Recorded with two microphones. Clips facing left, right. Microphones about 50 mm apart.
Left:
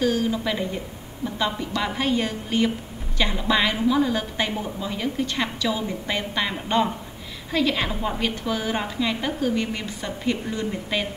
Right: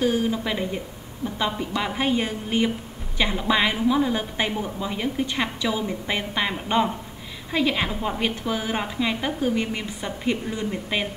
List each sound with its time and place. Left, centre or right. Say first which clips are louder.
0.0 s a woman's voice: even; centre
7.9 s a woman's voice: even; centre
8.2 s a woman's voice: even; centre